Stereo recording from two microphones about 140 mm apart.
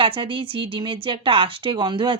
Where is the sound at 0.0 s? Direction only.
40° right (ahead or behind).